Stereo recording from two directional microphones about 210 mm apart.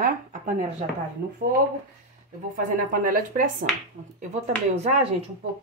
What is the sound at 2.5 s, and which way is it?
Speech, 40° right (ahead or behind).